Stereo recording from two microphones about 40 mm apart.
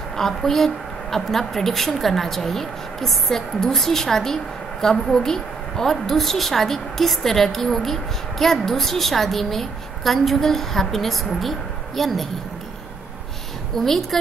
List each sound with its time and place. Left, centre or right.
0.1 s a woman's voice: centre
13.7 s a woman's voice: centre